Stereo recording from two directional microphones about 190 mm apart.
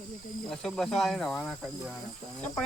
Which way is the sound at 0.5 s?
Centre (ahead or behind).